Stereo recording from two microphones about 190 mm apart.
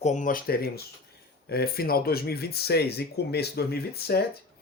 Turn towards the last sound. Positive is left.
turn(degrees=55)  # may be behind; listen again after turning